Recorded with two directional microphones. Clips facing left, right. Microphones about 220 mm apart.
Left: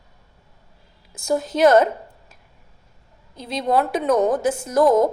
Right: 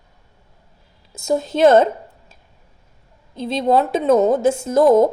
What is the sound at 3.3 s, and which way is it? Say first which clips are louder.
Speech: right 4 dB; 25° right (ahead or behind).